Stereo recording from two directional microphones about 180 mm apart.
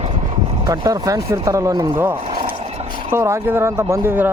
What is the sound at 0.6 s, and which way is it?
Speech, 20° right (ahead or behind).